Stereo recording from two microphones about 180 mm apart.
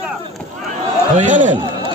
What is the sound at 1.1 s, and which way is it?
Speech, 45° right (ahead or behind).